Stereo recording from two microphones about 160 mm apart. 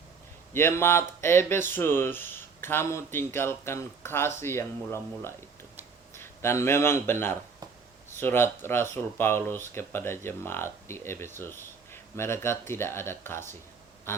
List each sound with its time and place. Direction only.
0.5 s speech: 15° left (ahead or behind)